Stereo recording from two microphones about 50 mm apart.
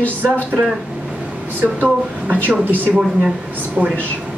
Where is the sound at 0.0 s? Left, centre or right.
Left.